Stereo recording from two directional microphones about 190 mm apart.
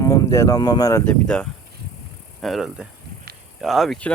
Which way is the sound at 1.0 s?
5° left (ahead or behind).